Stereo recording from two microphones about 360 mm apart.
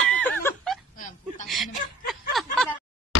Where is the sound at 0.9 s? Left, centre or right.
Left.